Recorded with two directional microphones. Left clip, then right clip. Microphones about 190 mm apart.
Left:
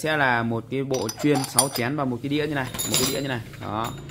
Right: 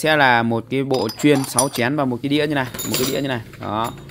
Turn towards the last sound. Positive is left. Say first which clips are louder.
# right 6 dB
turn(degrees=-45)  # may be behind; listen again after turning